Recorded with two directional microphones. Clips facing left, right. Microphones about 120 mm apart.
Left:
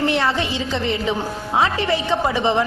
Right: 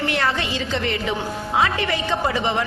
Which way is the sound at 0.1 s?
20° left (ahead or behind).